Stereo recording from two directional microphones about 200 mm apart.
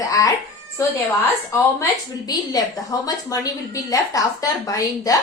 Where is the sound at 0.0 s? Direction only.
15° left (ahead or behind).